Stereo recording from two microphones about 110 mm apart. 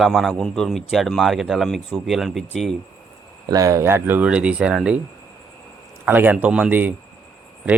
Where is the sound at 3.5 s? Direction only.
30° right (ahead or behind); by 5.0 s 10° right (ahead or behind).